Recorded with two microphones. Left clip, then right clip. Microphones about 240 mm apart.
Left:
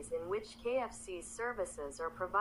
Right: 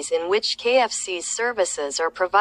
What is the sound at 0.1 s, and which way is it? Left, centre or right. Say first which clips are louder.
Speech: right 18 dB; right.